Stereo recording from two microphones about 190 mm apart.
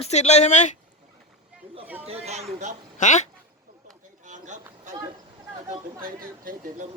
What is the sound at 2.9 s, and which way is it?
Speech, 40° left (ahead or behind).